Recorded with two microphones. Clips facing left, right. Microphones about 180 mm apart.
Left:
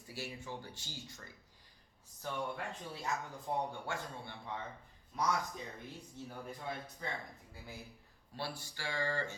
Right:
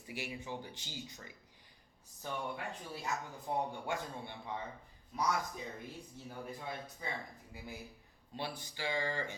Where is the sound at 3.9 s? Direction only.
15° right (ahead or behind).